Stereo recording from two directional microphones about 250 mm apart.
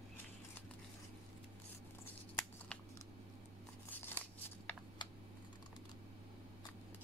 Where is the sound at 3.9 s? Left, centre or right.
Centre.